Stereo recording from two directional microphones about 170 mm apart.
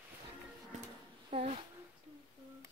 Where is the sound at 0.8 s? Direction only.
40° right (ahead or behind).